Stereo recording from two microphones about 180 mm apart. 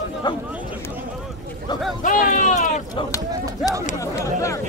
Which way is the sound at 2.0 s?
45° left (ahead or behind).